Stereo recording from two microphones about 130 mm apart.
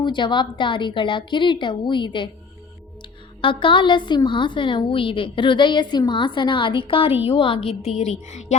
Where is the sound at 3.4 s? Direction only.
40° left (ahead or behind).